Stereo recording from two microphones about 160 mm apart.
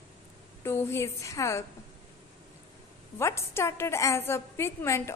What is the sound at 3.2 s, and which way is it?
A woman's voice, 15° left (ahead or behind).